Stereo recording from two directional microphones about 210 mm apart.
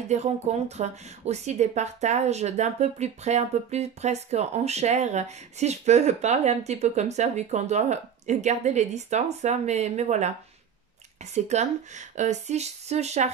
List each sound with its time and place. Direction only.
0.1 s a woman's voice: 30° right (ahead or behind)
11.3 s a woman's voice: 30° right (ahead or behind)